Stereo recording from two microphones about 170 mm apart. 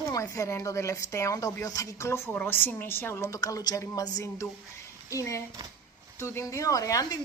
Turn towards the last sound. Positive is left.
turn(degrees=20)  # may be behind; listen again after turning